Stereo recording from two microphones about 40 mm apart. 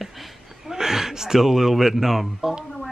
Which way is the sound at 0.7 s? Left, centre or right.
Centre.